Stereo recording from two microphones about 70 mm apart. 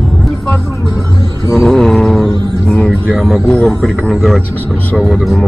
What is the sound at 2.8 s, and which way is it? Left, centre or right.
Music, left.